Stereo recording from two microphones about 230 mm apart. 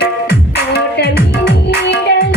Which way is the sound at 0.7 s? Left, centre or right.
Left.